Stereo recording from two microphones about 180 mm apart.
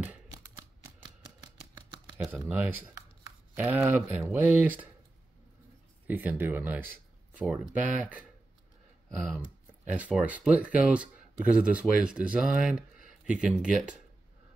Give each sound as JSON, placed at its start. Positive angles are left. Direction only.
{"t": 0.0, "sound": "a sound", "side_deg": -10}
{"t": 2.1, "sound": "speech", "side_deg": 0}
{"t": 6.0, "sound": "speech", "side_deg": -10}
{"t": 9.9, "sound": "speech", "side_deg": -5}